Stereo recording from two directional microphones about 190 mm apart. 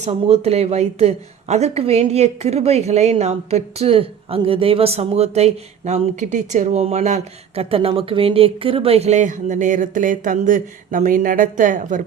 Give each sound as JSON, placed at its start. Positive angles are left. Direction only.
{"t": 0.0, "sound": "speech", "side_deg": -35}